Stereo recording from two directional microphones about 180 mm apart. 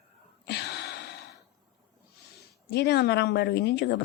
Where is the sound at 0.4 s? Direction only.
65° left (ahead or behind).